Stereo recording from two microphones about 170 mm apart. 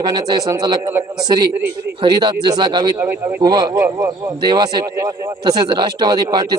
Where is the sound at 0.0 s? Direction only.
25° right (ahead or behind).